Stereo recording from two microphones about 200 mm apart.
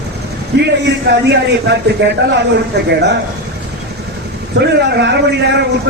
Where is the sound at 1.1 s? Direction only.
60° right (ahead or behind).